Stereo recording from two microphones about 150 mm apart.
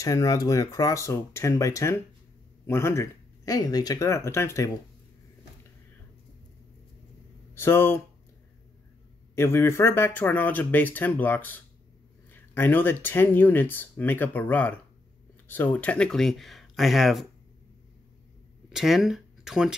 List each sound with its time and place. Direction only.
0.0 s speech: 20° left (ahead or behind)
7.5 s speech: 15° left (ahead or behind)
9.3 s speech: 15° left (ahead or behind); by 17.3 s centre (ahead or behind)
18.7 s speech: centre (ahead or behind)